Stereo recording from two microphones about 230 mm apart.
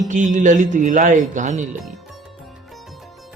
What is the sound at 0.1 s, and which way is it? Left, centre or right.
Speech, right.